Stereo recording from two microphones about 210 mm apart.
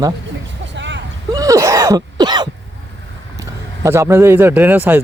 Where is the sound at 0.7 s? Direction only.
60° right (ahead or behind).